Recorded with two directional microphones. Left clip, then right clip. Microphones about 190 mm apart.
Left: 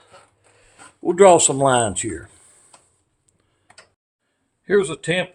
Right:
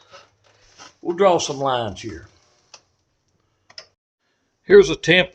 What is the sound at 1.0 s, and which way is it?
Speech, 50° left (ahead or behind).